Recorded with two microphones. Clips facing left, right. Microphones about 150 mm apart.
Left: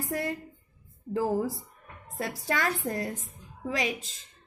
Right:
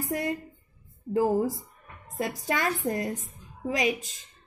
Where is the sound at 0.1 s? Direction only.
20° right (ahead or behind).